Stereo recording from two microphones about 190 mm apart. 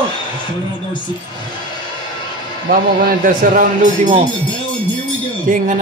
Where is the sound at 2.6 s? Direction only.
50° right (ahead or behind).